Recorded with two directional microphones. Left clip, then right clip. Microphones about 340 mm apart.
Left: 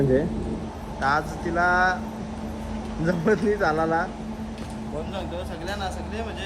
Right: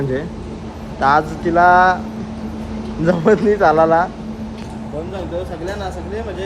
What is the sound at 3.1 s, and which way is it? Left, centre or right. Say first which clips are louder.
Speech: right 9 dB; right.